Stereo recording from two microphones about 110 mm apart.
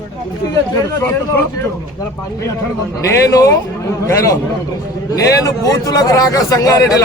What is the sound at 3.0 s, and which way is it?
A man's voice, 30° left (ahead or behind).